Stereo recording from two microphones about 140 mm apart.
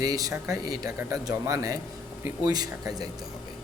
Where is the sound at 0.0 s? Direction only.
25° right (ahead or behind).